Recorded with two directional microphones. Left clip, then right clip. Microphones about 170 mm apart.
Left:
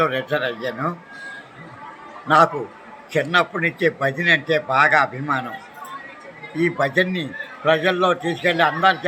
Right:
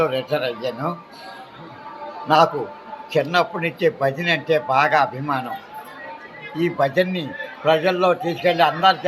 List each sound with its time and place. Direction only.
0.0 s a man's voice: 15° left (ahead or behind)
2.2 s a man's voice: 15° left (ahead or behind)
6.7 s a man's voice: 10° left (ahead or behind)